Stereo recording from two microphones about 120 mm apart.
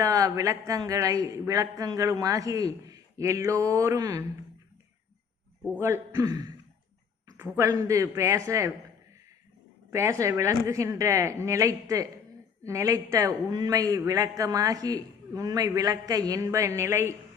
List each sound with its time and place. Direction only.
0.0 s a man's voice: 30° right (ahead or behind)
5.8 s a man's voice: 25° right (ahead or behind)
7.3 s a man's voice: 20° right (ahead or behind)
9.9 s a man's voice: 25° right (ahead or behind)